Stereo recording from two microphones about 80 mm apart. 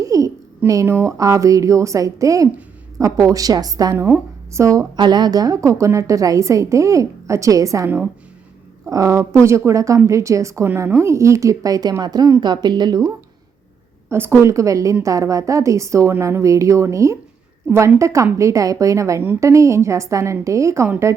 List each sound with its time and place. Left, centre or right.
0.0 s a sound: right
0.7 s a woman's voice: right
3.9 s speech: right
4.9 s a woman's voice: right
7.9 s a woman's voice: centre
8.9 s a woman's voice: right
12.4 s speech: right
14.1 s a woman's voice: right